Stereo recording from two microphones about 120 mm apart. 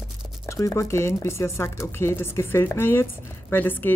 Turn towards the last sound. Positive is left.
turn(degrees=15)  # may be behind; listen again after turning